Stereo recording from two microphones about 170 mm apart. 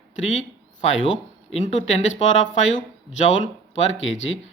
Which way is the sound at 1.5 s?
40° left (ahead or behind).